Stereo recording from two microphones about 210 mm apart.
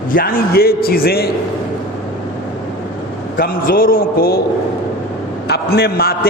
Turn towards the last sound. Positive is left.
turn(degrees=45)  # may be behind; listen again after turning